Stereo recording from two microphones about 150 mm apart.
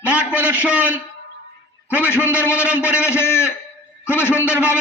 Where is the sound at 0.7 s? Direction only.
10° right (ahead or behind).